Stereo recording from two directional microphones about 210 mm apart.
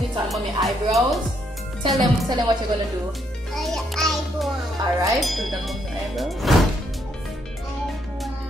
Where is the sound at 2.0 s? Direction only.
20° right (ahead or behind).